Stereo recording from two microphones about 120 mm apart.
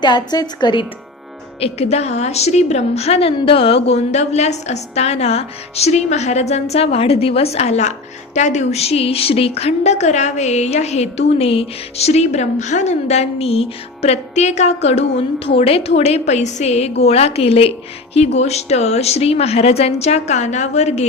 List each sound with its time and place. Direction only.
0.0 s a woman's voice: 35° left (ahead or behind)
1.6 s a woman's voice: 60° left (ahead or behind)